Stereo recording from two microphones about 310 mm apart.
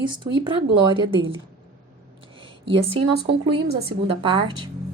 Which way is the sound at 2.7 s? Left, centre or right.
Centre.